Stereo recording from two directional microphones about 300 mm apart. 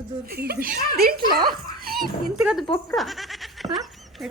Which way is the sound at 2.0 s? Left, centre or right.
Centre.